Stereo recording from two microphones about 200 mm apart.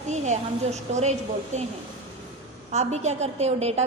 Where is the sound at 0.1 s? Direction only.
35° right (ahead or behind).